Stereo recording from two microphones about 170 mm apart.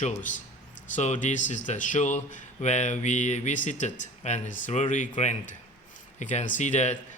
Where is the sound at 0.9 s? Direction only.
45° left (ahead or behind).